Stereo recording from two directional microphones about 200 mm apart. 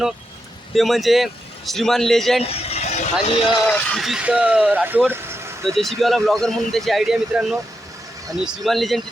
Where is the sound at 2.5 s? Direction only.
30° left (ahead or behind).